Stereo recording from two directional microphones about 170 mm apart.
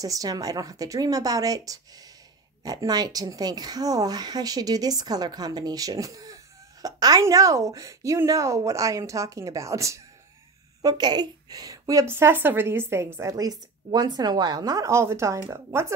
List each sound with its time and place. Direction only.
0.0 s a woman's voice: 20° right (ahead or behind)